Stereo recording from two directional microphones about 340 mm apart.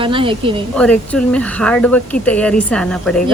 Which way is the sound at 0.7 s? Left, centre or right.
Centre.